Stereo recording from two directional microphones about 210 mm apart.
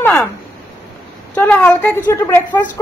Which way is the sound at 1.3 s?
5° left (ahead or behind).